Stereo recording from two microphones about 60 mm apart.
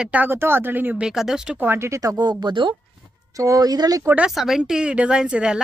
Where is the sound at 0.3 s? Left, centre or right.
Right.